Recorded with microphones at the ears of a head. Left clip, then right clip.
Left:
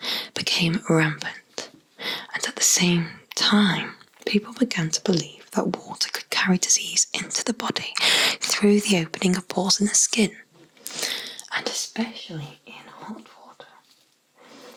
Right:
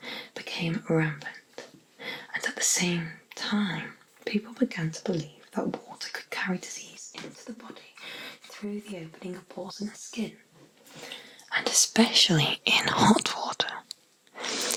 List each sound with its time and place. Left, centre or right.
0.0 s whispering: left
10.8 s a sound: left
11.8 s whispering: right
14.3 s zipper: right